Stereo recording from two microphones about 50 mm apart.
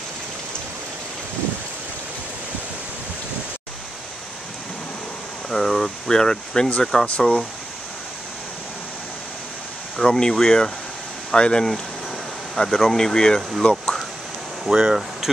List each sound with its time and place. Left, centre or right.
5.5 s speech: centre
7.1 s speech: left
10.0 s speech: centre
14.7 s speech: centre